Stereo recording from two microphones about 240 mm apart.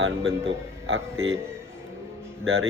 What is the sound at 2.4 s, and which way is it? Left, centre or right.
Speech, right.